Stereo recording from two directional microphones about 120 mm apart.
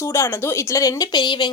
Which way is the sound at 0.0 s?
20° left (ahead or behind).